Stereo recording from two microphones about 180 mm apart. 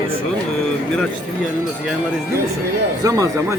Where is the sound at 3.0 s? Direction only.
20° right (ahead or behind).